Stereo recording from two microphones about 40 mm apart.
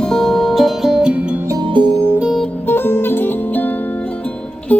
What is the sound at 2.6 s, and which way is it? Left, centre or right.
Music, left.